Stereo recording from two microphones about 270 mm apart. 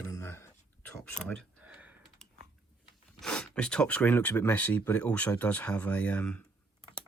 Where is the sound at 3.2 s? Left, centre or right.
Centre.